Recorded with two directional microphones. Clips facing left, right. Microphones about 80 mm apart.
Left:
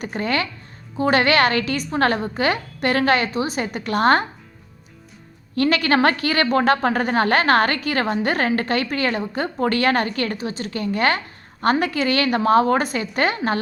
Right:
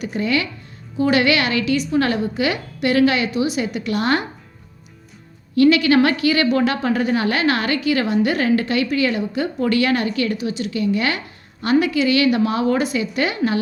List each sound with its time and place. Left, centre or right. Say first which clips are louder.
0.0 s a woman's voice: right 2 dB; left
5.5 s a woman's voice: right 4 dB; left